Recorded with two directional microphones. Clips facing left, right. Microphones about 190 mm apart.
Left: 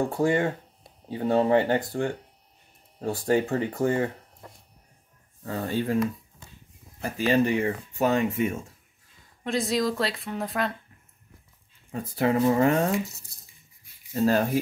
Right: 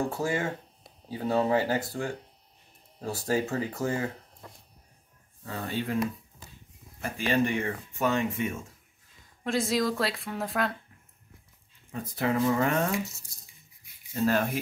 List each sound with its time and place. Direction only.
1.0 s speech: 30° left (ahead or behind)
5.4 s speech: 40° left (ahead or behind)
7.0 s speech: 40° left (ahead or behind)
9.4 s speech: centre (ahead or behind)
11.9 s speech: 35° left (ahead or behind)
14.1 s speech: 40° left (ahead or behind)